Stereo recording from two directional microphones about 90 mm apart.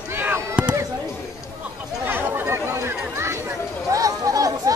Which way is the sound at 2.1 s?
25° right (ahead or behind).